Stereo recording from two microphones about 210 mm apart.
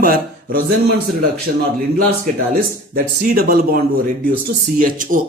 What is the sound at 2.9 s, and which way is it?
A man's voice, 45° right (ahead or behind).